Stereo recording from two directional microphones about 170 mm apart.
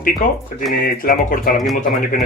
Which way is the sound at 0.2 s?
50° left (ahead or behind).